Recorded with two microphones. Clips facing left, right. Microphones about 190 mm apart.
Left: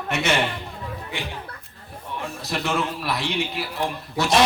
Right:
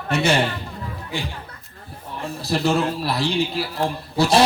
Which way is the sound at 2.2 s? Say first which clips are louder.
Right 7 dB; 35° right (ahead or behind).